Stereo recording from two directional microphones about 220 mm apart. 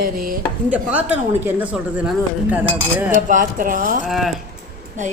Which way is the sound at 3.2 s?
35° right (ahead or behind).